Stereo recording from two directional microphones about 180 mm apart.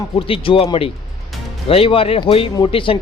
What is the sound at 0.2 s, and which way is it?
Speech, 30° left (ahead or behind).